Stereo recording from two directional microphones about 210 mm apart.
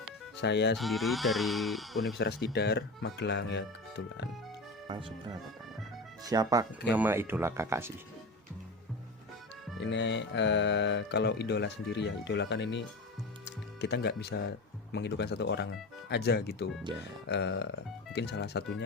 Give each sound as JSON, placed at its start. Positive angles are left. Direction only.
{"t": 0.4, "sound": "speech", "side_deg": 55}
{"t": 0.8, "sound": "speech", "side_deg": 0}
{"t": 2.1, "sound": "speech", "side_deg": 50}
{"t": 4.9, "sound": "speech", "side_deg": -20}
{"t": 9.8, "sound": "speech", "side_deg": 60}
{"t": 13.4, "sound": "music", "side_deg": 55}
{"t": 14.9, "sound": "speech", "side_deg": 55}